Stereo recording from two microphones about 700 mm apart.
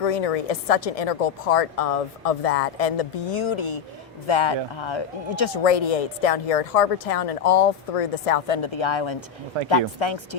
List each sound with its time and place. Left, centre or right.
0.0 s a woman's voice: left